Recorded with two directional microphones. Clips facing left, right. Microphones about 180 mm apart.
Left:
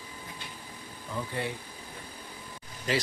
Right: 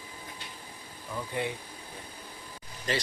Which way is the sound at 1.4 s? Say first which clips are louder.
Right 2 dB; 15° right (ahead or behind).